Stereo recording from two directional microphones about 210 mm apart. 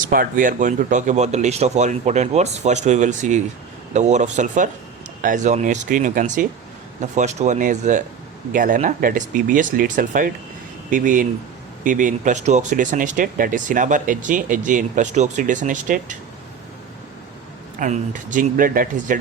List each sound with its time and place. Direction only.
0.1 s speech: 40° right (ahead or behind)
17.7 s speech: 35° right (ahead or behind)